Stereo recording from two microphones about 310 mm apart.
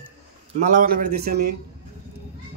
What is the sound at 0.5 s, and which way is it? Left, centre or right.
Speech, right.